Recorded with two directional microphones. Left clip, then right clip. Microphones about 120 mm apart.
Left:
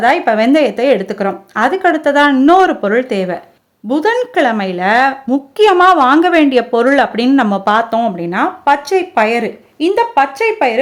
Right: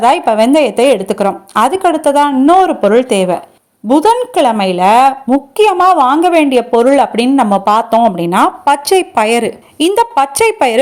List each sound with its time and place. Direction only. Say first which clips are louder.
0.0 s a woman's voice: right 2 dB; 15° right (ahead or behind)
7.5 s a woman's voice: right 3 dB; 15° right (ahead or behind)
8.1 s speech: right 5 dB; 30° right (ahead or behind); by 10.8 s 50° right (ahead or behind)